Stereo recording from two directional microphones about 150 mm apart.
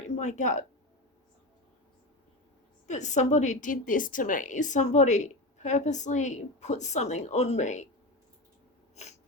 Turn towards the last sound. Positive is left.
turn(degrees=50)  # may be behind; listen again after turning